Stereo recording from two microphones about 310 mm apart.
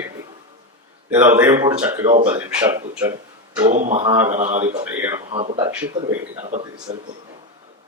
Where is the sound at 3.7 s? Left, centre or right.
Right.